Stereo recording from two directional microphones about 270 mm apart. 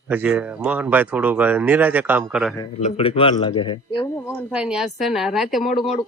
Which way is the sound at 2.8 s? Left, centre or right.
Left.